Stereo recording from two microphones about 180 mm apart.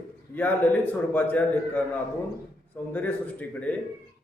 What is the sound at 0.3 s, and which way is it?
A man's voice, 10° left (ahead or behind).